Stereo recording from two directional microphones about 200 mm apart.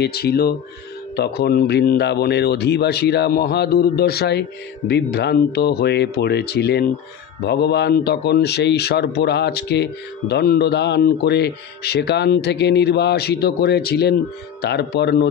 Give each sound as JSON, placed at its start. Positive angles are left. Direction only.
{"t": 0.0, "sound": "speech", "side_deg": 55}